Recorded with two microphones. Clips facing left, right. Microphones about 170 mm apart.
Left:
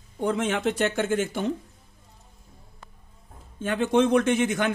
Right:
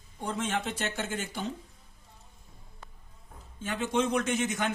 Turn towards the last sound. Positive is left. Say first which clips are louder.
# left 7 dB
turn(degrees=60)  # may be behind; listen again after turning